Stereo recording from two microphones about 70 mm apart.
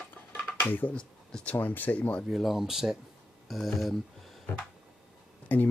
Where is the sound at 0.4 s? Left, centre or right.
Left.